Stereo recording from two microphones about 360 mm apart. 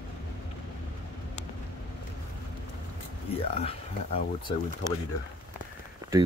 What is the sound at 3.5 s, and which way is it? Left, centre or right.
Speech, centre.